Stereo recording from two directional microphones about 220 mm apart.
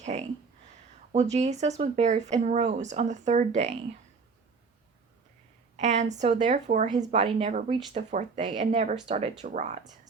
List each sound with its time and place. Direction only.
0.0 s speech: 30° right (ahead or behind)
5.7 s speech: 30° right (ahead or behind)